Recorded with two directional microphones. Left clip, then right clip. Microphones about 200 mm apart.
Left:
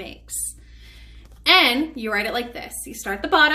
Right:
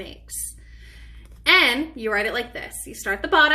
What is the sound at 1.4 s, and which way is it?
A woman's voice, 25° left (ahead or behind).